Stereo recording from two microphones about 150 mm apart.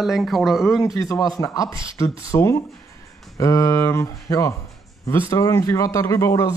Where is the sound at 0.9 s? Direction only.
20° left (ahead or behind).